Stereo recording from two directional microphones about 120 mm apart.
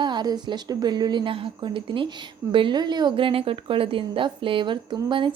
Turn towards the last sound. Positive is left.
turn(degrees=-40)  # may be behind; listen again after turning